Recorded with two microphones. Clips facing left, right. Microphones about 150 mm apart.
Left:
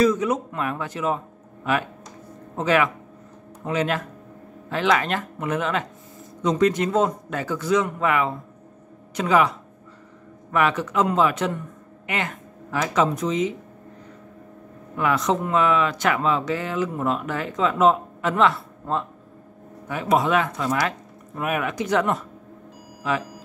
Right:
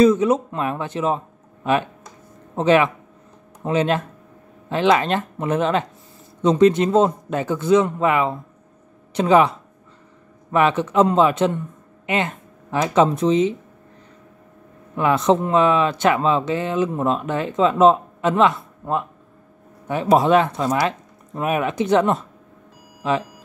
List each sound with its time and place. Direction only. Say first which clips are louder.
0.0 s speech: right 5 dB; 25° right (ahead or behind)
10.5 s speech: right 4 dB; 25° right (ahead or behind)
15.0 s speech: right 5 dB; 25° right (ahead or behind)
19.9 s speech: right 5 dB; 30° right (ahead or behind)